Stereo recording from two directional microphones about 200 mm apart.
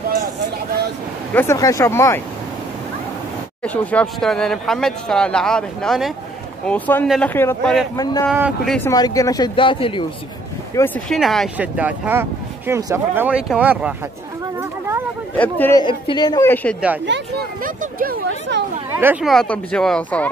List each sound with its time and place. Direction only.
1.3 s speech: 10° left (ahead or behind)
3.6 s speech: 5° left (ahead or behind)
8.3 s speech: 5° right (ahead or behind)
8.7 s speech: 15° left (ahead or behind)
10.8 s speech: 15° left (ahead or behind)
11.1 s speech: centre (ahead or behind)
14.6 s a sound: 10° right (ahead or behind)
15.3 s speech: 10° left (ahead or behind)
15.8 s speech: 25° left (ahead or behind)
17.0 s speech: 60° right (ahead or behind)
17.6 s speech: 45° right (ahead or behind)
18.5 s speech: 60° right (ahead or behind)
18.9 s speech: 10° right (ahead or behind)
19.2 s speech: 5° left (ahead or behind)